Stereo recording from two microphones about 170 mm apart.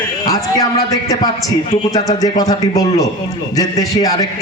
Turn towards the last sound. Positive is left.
turn(degrees=20)  # may be behind; listen again after turning